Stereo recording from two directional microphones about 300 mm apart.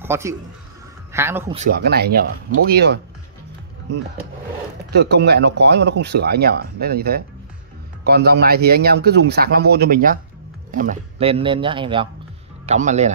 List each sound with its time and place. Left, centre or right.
0.0 s a man's voice: centre
1.5 s speech: right
4.9 s speech: right